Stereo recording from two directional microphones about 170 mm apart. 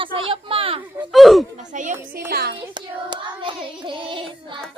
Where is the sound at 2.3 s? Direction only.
70° right (ahead or behind).